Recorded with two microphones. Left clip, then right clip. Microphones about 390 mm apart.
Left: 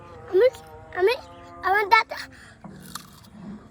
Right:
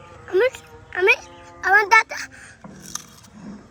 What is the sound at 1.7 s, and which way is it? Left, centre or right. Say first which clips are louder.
Music: right 4 dB; centre.